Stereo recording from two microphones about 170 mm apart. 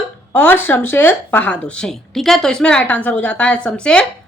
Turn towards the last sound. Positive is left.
turn(degrees=5)  # may be behind; listen again after turning